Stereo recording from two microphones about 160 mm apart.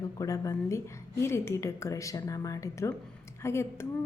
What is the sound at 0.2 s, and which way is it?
A woman's voice, 20° left (ahead or behind).